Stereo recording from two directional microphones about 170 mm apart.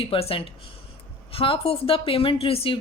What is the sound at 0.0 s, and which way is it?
Speech, 35° left (ahead or behind).